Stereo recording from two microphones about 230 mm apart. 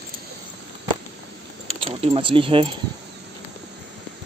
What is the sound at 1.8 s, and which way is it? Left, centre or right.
Speech, right.